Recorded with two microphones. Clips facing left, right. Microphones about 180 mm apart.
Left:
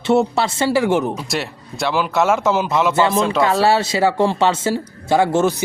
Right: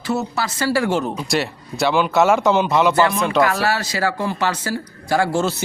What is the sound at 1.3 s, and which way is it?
A man's voice, centre (ahead or behind).